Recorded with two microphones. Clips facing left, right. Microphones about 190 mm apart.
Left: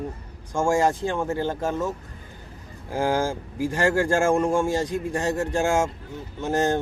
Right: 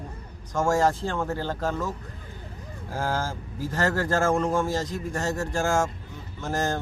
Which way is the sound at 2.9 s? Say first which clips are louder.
Left 6 dB; 15° left (ahead or behind).